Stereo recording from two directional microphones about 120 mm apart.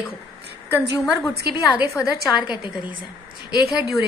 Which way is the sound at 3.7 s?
Centre (ahead or behind).